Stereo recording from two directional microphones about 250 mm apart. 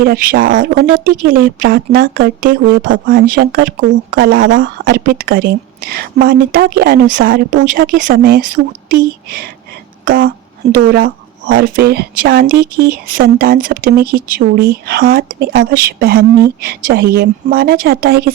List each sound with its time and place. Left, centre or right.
0.0 s speech: right
4.9 s speech: right
10.1 s speech: right